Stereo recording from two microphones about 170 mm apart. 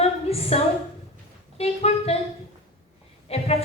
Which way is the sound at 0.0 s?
35° left (ahead or behind).